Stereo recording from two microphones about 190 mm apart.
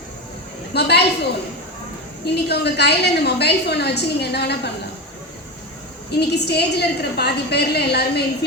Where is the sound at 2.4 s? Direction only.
60° left (ahead or behind).